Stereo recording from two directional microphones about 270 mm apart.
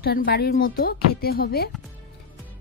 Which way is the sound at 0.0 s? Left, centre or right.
Left.